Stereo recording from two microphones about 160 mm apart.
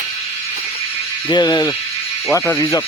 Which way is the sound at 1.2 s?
25° left (ahead or behind).